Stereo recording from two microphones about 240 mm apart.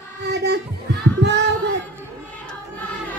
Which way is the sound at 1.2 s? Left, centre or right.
Right.